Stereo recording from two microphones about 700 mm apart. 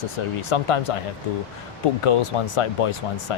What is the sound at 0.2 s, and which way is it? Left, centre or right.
Speech, left.